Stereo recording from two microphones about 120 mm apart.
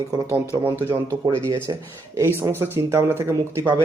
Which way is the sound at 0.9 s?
20° right (ahead or behind).